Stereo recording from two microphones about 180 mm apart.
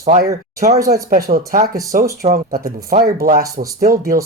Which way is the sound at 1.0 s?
55° right (ahead or behind).